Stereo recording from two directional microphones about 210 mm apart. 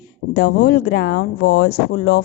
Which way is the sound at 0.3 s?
50° left (ahead or behind).